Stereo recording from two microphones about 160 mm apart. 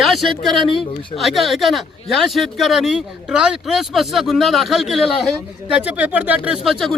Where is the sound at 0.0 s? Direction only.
Centre (ahead or behind).